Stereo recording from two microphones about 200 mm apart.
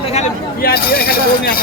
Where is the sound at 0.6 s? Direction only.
50° left (ahead or behind).